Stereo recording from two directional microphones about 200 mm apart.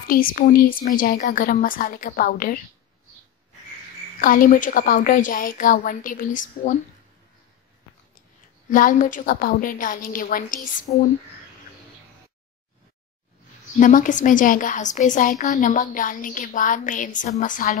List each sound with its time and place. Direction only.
0.1 s a woman's voice: 45° left (ahead or behind)
4.2 s a woman's voice: 45° left (ahead or behind)
8.6 s a woman's voice: 40° left (ahead or behind)
13.7 s a woman's voice: 40° left (ahead or behind)